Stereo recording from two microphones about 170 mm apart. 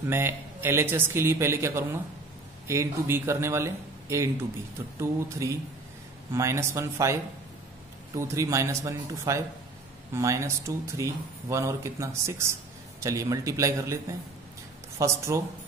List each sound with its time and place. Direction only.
0.1 s speech: 15° right (ahead or behind)